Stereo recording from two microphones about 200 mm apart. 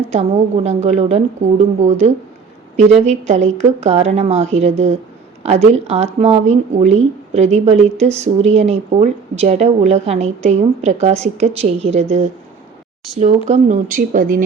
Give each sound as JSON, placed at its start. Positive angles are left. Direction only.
{"t": 0.1, "sound": "a woman's voice", "side_deg": -35}
{"t": 5.7, "sound": "a woman's voice", "side_deg": -30}
{"t": 13.1, "sound": "a woman's voice", "side_deg": -35}